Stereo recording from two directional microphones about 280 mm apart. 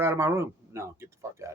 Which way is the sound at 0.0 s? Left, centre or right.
Centre.